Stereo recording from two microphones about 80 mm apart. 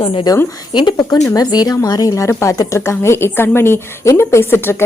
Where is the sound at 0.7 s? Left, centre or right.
Left.